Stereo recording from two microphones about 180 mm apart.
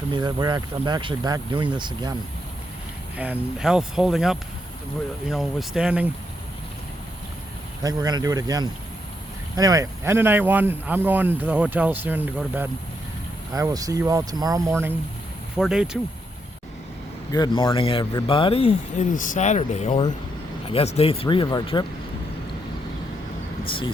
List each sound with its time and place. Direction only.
0.1 s speech: 25° right (ahead or behind)
3.2 s speech: 5° right (ahead or behind)
7.8 s speech: 20° right (ahead or behind)
15.5 s speech: 5° right (ahead or behind)
17.3 s speech: 25° left (ahead or behind)
19.1 s speech: 45° left (ahead or behind); by 21.8 s 25° left (ahead or behind)
23.6 s speech: 30° left (ahead or behind)